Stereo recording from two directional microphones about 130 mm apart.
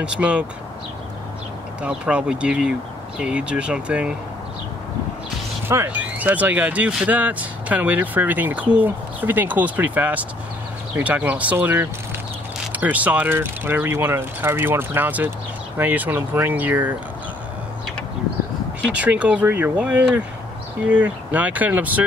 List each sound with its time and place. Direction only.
0.0 s speech: 10° right (ahead or behind)
1.8 s speech: 10° right (ahead or behind)
5.7 s speech: 15° right (ahead or behind)
18.9 s speech: 10° right (ahead or behind)